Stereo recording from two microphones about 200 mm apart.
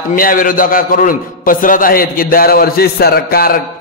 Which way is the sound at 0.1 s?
45° left (ahead or behind).